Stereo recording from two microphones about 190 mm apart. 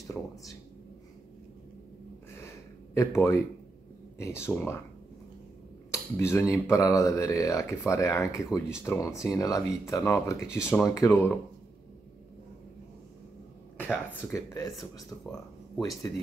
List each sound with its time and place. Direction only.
0.0 s speech: 15° left (ahead or behind)
2.3 s a sound: 15° left (ahead or behind)
4.2 s speech: 15° left (ahead or behind)
6.1 s speech: 15° left (ahead or behind)
13.7 s speech: 10° left (ahead or behind)